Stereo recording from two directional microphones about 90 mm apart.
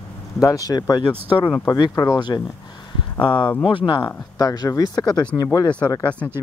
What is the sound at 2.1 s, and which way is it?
Speech, 55° left (ahead or behind).